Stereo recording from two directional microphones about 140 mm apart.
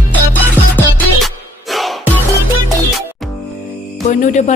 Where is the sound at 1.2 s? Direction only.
Centre (ahead or behind).